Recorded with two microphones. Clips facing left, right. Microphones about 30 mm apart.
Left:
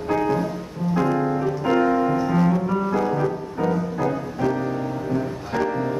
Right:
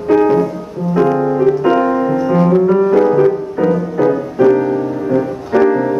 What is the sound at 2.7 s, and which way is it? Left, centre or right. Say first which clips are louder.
Music: right 11 dB; right.